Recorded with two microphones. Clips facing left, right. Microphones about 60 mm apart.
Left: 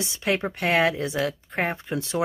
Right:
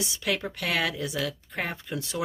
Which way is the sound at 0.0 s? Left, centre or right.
Left.